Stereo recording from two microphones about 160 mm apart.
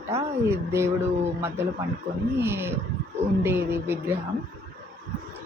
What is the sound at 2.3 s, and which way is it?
A woman's voice, 15° right (ahead or behind).